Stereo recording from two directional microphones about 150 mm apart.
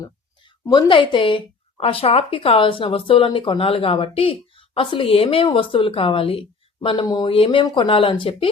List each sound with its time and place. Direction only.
0.6 s a woman's voice: 30° left (ahead or behind)